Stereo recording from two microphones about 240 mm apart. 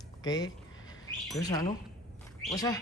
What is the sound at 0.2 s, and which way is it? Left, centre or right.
Speech, centre.